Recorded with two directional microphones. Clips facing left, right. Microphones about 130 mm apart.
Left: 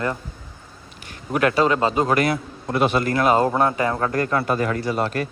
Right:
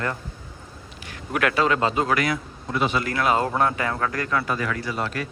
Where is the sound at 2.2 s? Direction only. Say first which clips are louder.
Left 4 dB; 55° left (ahead or behind).